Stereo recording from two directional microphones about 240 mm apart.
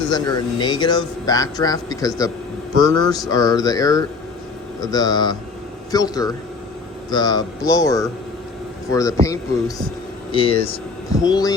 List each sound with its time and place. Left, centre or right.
0.1 s speech: centre
9.2 s speech: centre